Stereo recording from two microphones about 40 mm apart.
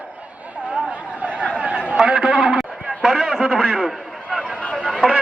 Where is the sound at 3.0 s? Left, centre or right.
Right.